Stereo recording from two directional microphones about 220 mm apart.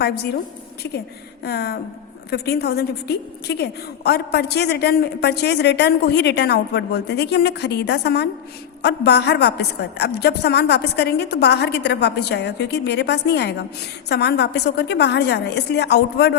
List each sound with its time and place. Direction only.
1.5 s a woman's voice: 45° left (ahead or behind)